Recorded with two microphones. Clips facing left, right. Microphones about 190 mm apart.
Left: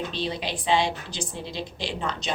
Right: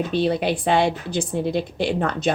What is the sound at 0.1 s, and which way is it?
A woman's voice, 55° right (ahead or behind).